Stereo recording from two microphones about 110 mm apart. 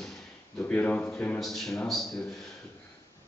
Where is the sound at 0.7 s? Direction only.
15° left (ahead or behind).